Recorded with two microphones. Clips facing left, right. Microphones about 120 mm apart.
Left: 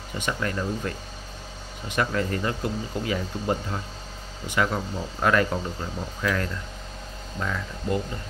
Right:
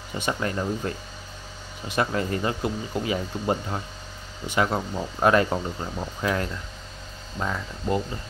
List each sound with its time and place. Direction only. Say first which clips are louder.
0.2 s speech: right 1 dB; 25° right (ahead or behind)
2.0 s speech: right 1 dB; 25° right (ahead or behind)